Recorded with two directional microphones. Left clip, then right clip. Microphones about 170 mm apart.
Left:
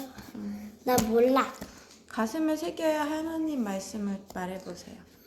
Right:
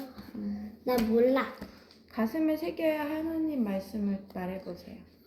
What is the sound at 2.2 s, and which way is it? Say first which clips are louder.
A woman's voice: left 1 dB; 5° left (ahead or behind).